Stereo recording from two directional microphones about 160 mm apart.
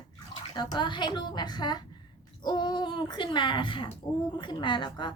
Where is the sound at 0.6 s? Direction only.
30° left (ahead or behind).